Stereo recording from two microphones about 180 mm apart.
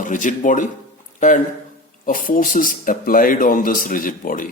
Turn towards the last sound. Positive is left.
turn(degrees=50)  # may be behind; listen again after turning